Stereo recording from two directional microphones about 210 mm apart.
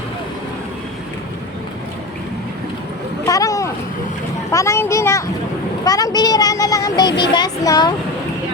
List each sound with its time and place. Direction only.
3.2 s boat: 15° left (ahead or behind)
4.5 s speech: 15° left (ahead or behind)
5.8 s a sound: 15° left (ahead or behind)